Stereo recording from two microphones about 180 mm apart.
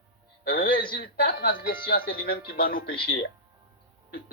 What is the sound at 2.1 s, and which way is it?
Speech, 55° left (ahead or behind).